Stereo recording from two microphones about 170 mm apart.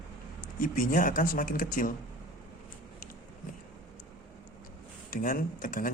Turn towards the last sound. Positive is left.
turn(degrees=55)  # may be behind; listen again after turning